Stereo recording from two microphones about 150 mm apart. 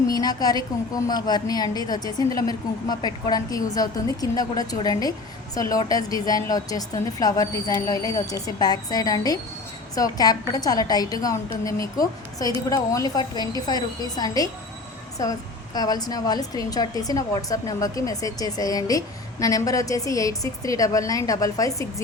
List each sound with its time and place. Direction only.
0.1 s speech: 25° left (ahead or behind)